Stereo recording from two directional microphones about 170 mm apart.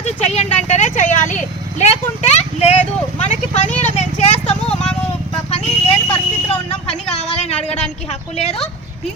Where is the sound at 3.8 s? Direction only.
45° left (ahead or behind).